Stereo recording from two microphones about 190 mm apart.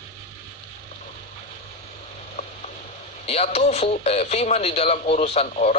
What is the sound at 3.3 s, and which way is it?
Speech, 35° left (ahead or behind).